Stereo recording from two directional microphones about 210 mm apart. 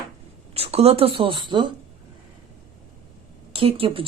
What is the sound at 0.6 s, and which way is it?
A woman's voice, 30° right (ahead or behind).